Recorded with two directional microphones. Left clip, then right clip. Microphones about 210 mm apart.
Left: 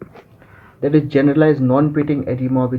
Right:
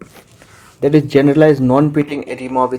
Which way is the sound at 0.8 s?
40° right (ahead or behind).